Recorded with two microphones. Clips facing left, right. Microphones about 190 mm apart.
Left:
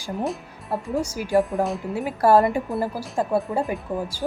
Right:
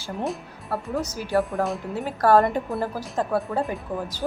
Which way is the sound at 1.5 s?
Centre (ahead or behind).